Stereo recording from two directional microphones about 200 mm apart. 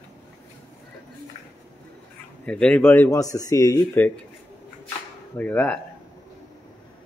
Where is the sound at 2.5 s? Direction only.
5° left (ahead or behind).